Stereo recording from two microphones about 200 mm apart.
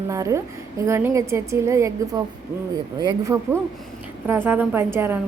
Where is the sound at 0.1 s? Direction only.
15° right (ahead or behind).